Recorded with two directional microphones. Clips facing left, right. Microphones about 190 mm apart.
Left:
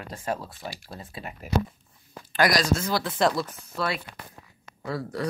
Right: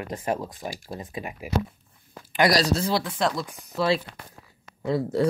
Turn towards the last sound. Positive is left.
turn(degrees=-25)  # may be behind; listen again after turning